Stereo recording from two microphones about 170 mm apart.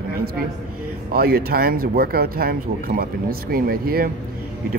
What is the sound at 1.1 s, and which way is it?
Speech, 65° right (ahead or behind).